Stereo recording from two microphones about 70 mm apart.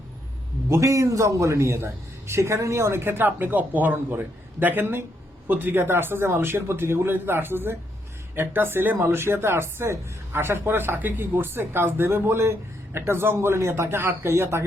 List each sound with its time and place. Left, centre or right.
0.7 s speech: right